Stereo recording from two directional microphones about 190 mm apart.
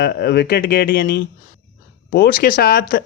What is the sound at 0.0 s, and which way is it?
Speech, 55° left (ahead or behind).